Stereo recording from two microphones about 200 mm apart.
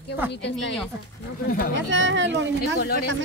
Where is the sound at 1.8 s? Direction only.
70° right (ahead or behind).